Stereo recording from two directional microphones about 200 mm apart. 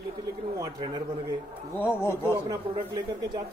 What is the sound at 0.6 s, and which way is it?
Speech, 20° right (ahead or behind).